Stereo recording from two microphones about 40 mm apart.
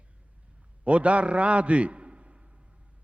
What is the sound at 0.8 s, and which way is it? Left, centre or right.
A man's voice, right.